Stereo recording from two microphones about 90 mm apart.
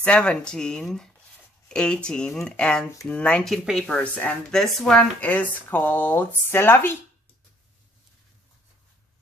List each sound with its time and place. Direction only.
0.0 s speech: 10° left (ahead or behind)
3.4 s speech: centre (ahead or behind)
5.3 s speech: 20° left (ahead or behind)